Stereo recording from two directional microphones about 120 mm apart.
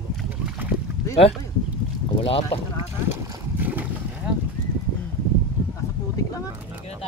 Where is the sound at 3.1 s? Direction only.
15° right (ahead or behind).